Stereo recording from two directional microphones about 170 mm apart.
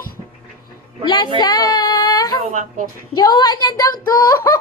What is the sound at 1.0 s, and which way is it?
Speech, 25° left (ahead or behind).